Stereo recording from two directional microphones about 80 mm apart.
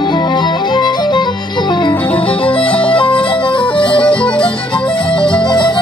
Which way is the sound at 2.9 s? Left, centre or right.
Left.